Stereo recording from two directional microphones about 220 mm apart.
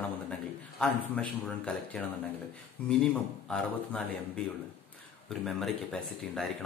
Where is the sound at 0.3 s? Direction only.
5° left (ahead or behind).